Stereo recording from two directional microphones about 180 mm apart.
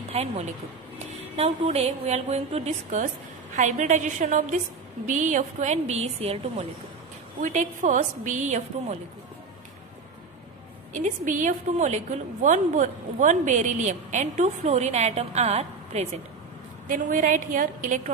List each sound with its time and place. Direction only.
0.1 s a woman's voice: 35° right (ahead or behind)
10.9 s a woman's voice: 45° right (ahead or behind)
16.8 s a woman's voice: 50° right (ahead or behind)